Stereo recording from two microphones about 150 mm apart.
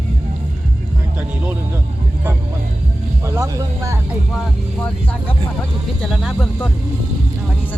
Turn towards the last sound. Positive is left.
turn(degrees=0)  # may be behind; listen again after turning